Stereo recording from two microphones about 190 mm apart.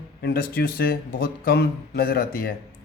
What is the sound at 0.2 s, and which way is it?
Speech, 55° left (ahead or behind).